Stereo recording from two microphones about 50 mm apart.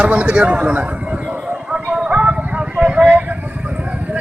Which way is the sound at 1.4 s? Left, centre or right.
Centre.